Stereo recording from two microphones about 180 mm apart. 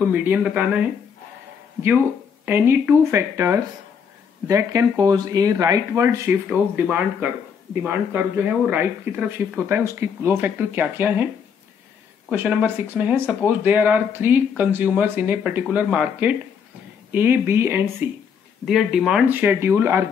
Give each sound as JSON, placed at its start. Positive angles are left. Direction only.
{"t": 0.0, "sound": "speech", "side_deg": -10}
{"t": 2.4, "sound": "speech", "side_deg": -10}
{"t": 12.3, "sound": "speech", "side_deg": -10}
{"t": 18.7, "sound": "speech", "side_deg": 0}